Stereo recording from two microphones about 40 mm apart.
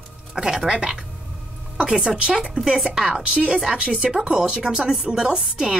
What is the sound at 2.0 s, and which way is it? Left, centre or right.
A woman's voice, centre.